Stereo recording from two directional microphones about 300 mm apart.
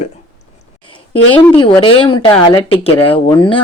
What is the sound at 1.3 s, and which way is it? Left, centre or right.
Speech, centre.